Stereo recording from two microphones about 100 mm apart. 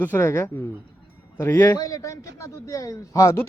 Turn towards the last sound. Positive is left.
turn(degrees=35)  # may be behind; listen again after turning